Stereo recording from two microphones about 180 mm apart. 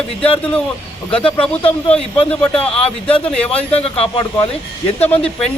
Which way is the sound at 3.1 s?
5° left (ahead or behind).